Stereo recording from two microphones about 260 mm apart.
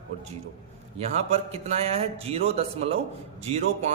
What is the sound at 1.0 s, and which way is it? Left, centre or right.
A man's voice, right.